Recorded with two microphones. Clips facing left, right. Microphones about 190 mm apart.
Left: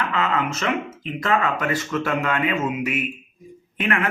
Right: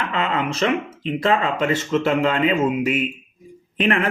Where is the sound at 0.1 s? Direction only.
30° right (ahead or behind).